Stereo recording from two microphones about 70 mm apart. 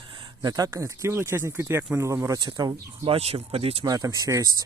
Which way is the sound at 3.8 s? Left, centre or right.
Right.